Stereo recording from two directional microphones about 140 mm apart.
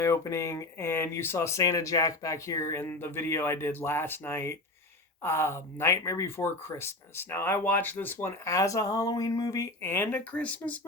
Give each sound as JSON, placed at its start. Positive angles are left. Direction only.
{"t": 0.0, "sound": "speech", "side_deg": 20}